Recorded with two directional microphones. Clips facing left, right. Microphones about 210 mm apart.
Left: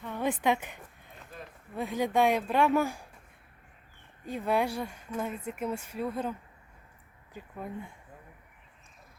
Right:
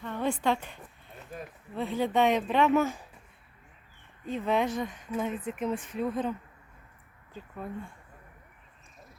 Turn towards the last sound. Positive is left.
turn(degrees=20)  # may be behind; listen again after turning